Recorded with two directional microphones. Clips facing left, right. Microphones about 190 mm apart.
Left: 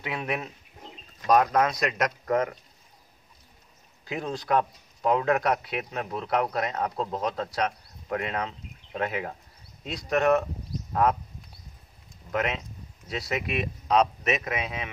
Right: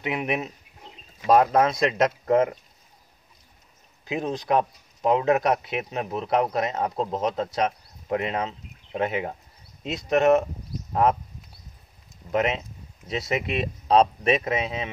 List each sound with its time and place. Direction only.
0.0 s speech: 20° right (ahead or behind)
4.0 s speech: 20° right (ahead or behind)
12.3 s speech: 25° right (ahead or behind)